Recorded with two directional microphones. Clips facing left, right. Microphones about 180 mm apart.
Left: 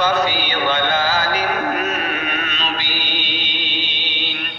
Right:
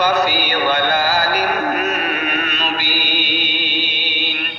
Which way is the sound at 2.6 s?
10° right (ahead or behind).